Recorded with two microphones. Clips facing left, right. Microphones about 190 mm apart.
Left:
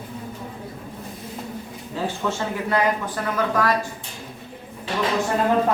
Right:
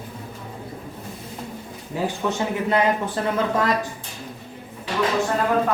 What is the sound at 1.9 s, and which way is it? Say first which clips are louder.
Speech: right 2 dB; 15° right (ahead or behind).